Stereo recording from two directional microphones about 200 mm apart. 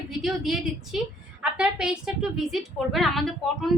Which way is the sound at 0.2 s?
Centre (ahead or behind).